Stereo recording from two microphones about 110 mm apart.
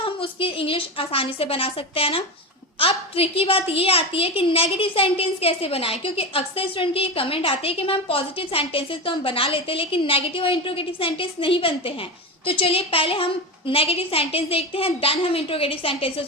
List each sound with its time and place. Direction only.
0.0 s a woman's voice: 55° left (ahead or behind)